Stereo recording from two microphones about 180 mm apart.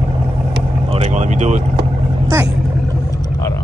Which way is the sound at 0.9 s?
40° right (ahead or behind).